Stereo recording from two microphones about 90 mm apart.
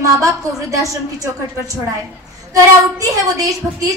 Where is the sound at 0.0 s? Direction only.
40° right (ahead or behind).